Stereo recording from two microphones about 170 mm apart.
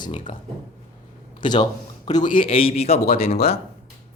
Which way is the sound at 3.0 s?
60° left (ahead or behind).